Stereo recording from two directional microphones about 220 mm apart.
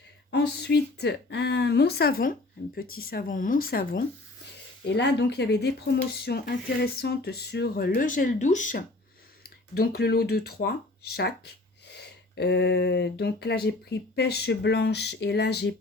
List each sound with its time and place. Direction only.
0.3 s speech: 50° left (ahead or behind)